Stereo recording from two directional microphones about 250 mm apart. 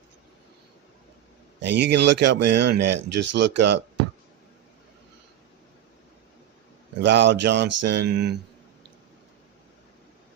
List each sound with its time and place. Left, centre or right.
1.6 s speech: right
7.0 s speech: right